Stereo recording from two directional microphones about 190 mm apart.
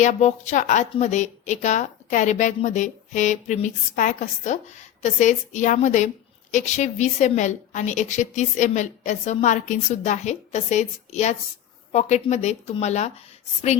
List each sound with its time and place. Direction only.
0.0 s a woman's voice: 40° left (ahead or behind)